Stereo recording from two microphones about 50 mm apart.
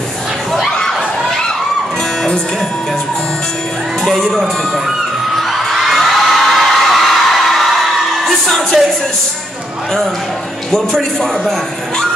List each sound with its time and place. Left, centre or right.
0.7 s children shouting: centre
4.0 s music: centre
5.3 s a sound: centre
8.2 s music: centre
10.7 s a man's voice: centre